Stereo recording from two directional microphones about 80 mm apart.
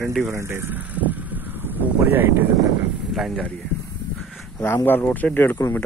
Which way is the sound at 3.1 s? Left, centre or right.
Centre.